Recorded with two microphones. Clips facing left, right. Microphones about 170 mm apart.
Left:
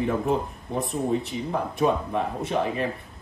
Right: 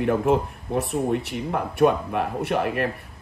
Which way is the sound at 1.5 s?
70° right (ahead or behind).